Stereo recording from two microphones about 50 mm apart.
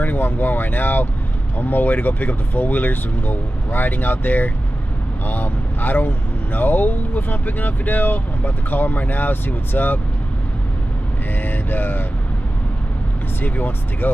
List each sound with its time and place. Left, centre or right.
0.0 s speech: left
11.4 s speech: left
13.4 s speech: left